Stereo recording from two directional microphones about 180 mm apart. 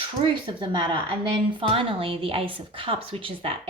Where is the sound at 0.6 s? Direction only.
30° right (ahead or behind).